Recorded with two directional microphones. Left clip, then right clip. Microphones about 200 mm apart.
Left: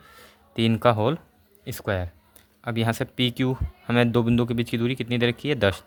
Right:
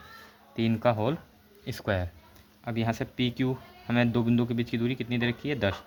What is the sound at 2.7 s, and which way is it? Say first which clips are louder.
Speech: left 5 dB; 40° left (ahead or behind).